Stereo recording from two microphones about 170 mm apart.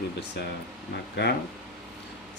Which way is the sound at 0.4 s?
80° left.